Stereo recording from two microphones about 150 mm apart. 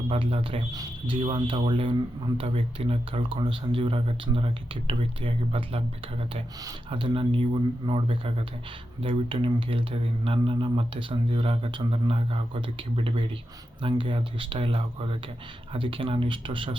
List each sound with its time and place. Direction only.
0.1 s speech: 40° right (ahead or behind)